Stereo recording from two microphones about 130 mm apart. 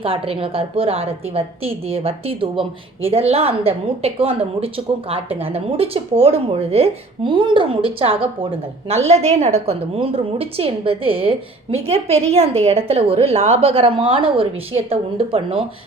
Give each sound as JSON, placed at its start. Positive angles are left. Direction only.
{"t": 0.0, "sound": "a woman's voice", "side_deg": -45}